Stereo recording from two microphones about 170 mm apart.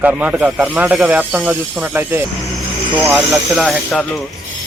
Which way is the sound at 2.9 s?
25° right (ahead or behind).